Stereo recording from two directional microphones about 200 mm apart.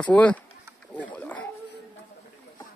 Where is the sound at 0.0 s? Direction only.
5° left (ahead or behind).